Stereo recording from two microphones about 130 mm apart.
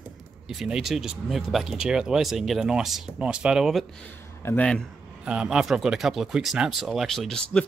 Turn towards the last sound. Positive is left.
turn(degrees=5)  # may be behind; listen again after turning